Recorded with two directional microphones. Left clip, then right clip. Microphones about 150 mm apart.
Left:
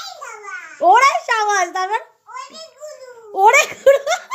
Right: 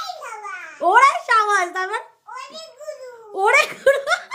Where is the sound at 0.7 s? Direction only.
10° left (ahead or behind).